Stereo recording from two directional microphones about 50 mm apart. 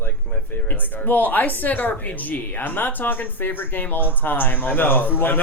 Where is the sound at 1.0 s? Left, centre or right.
Left.